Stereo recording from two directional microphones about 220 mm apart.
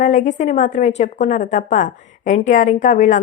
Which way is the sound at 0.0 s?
35° left (ahead or behind).